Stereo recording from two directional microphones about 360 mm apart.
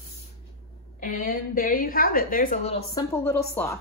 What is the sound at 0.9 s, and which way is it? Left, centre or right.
A woman's voice, left.